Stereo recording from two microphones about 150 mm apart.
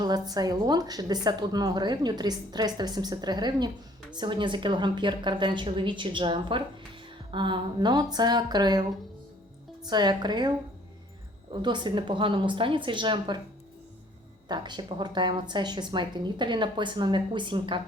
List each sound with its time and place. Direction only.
0.0 s a woman's voice: 25° right (ahead or behind)
9.8 s a woman's voice: 30° right (ahead or behind)
11.6 s a woman's voice: 30° right (ahead or behind)
14.4 s a woman's voice: 30° right (ahead or behind)